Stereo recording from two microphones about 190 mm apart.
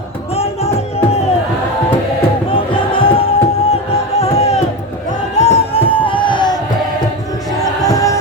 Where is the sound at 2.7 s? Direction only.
30° left (ahead or behind).